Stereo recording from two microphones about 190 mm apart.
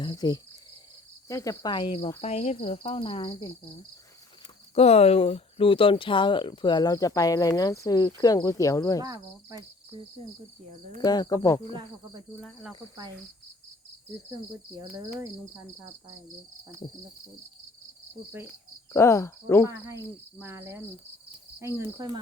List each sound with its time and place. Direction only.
0.0 s cricket: 20° left (ahead or behind)
1.3 s speech: 15° left (ahead or behind)
4.7 s speech: 35° left (ahead or behind); by 9.0 s 15° left (ahead or behind)
9.0 s speech: 20° right (ahead or behind)
11.0 s speech: 20° left (ahead or behind)
12.4 s speech: 5° left (ahead or behind)
14.3 s speech: 15° right (ahead or behind)
18.3 s speech: 15° right (ahead or behind)
18.9 s cricket: 15° left (ahead or behind)
19.6 s speech: 15° right (ahead or behind)